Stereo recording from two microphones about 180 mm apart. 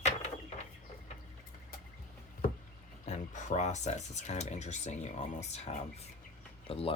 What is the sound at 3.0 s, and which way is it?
Speech, 40° left (ahead or behind).